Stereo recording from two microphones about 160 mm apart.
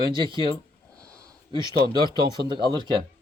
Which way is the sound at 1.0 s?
20° right (ahead or behind).